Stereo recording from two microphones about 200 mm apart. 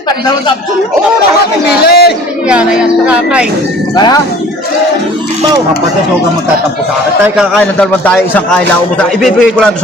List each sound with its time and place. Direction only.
1.6 s a man's voice: 50° left (ahead or behind)
2.5 s a man's voice: 5° right (ahead or behind)
3.9 s speech: 20° left (ahead or behind)
7.3 s a man's voice: 5° left (ahead or behind)